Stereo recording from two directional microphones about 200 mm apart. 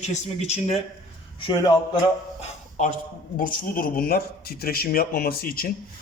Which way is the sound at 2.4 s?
40° left (ahead or behind).